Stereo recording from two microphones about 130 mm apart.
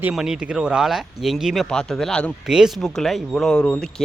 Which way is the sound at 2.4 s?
5° right (ahead or behind).